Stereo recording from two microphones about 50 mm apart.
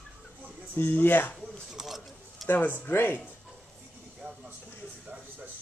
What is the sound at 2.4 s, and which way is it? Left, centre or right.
Speech, left.